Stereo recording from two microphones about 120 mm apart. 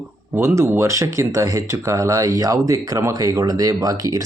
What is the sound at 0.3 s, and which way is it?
Speech, 25° right (ahead or behind).